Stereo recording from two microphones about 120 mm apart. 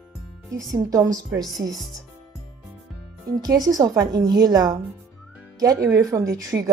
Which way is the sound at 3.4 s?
30° right (ahead or behind).